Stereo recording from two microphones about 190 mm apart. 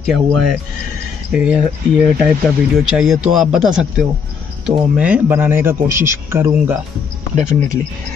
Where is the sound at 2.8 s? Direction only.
5° right (ahead or behind).